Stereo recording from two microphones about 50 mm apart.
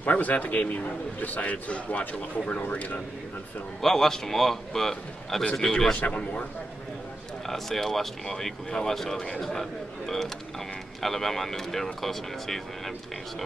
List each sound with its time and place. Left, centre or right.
0.1 s a man's voice: left
3.8 s a man's voice: centre
5.9 s a man's voice: left
7.4 s a man's voice: centre